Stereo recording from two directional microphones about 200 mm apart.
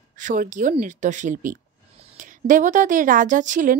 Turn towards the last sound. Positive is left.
turn(degrees=-40)  # may be behind; listen again after turning